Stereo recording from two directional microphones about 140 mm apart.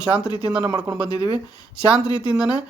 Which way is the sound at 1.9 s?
5° right (ahead or behind).